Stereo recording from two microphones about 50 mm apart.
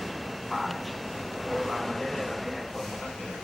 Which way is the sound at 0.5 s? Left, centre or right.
Centre.